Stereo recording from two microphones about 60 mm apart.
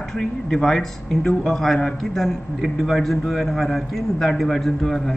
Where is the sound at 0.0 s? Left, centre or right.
Centre.